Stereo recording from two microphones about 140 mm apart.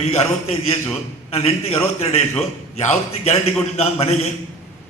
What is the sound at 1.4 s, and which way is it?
Speech, 50° left (ahead or behind).